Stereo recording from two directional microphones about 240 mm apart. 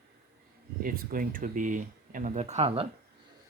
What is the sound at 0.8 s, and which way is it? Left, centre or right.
Speech, right.